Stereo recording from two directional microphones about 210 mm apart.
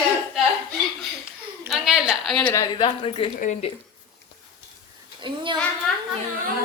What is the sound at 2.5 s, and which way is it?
Speech, 15° left (ahead or behind).